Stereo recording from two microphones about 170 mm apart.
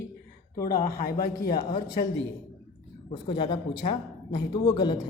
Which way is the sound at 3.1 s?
30° left (ahead or behind).